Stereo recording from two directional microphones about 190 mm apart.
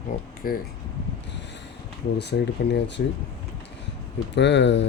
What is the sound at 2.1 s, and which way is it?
Speech, 60° left (ahead or behind).